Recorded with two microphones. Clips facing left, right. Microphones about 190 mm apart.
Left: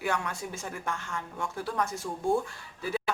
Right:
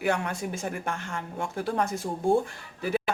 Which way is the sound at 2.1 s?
35° right (ahead or behind).